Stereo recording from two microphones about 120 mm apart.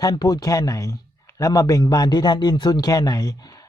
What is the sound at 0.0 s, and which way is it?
A man's voice, 30° left (ahead or behind).